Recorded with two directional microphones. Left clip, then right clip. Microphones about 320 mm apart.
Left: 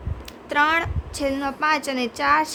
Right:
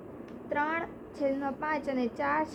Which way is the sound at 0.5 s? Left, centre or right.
Left.